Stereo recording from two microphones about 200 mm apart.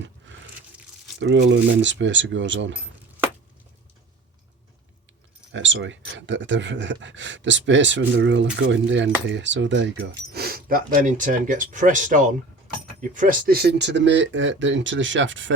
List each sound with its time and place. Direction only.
1.2 s speech: 65° right (ahead or behind)
5.5 s speech: 65° right (ahead or behind)